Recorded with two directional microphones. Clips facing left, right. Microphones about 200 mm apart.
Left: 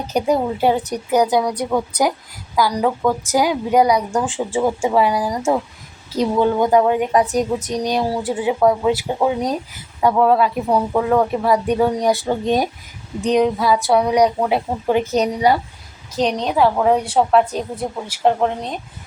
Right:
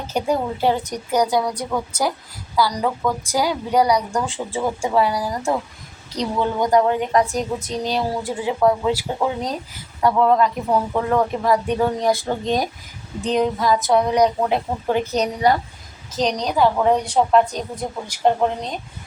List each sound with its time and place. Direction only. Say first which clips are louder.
0.1 s a woman's voice: left 3 dB; 15° left (ahead or behind)